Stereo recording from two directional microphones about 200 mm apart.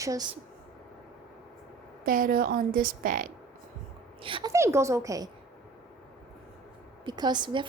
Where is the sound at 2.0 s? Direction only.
45° right (ahead or behind).